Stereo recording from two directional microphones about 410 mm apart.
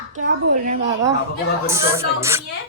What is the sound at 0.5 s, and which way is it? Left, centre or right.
Speech, centre.